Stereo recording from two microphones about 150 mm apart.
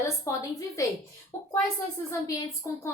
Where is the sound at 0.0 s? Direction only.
20° left (ahead or behind).